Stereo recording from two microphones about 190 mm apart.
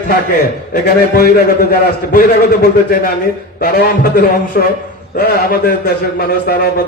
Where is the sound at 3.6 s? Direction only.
55° left (ahead or behind).